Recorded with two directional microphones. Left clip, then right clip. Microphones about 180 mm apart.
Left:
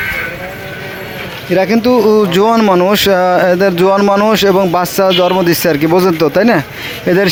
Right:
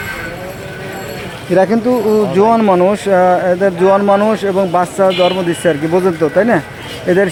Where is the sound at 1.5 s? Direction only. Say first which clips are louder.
Left 1 dB; 10° left (ahead or behind).